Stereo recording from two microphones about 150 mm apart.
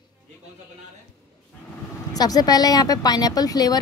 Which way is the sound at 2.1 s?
25° left (ahead or behind).